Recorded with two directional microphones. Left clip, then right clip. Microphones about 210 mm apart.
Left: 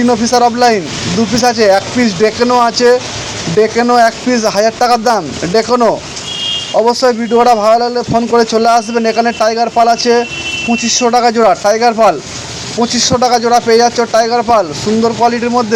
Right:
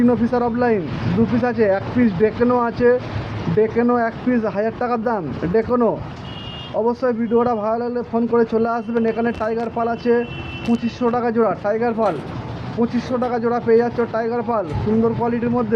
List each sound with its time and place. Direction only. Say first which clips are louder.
0.0 s speech: left 9 dB; 20° left (ahead or behind)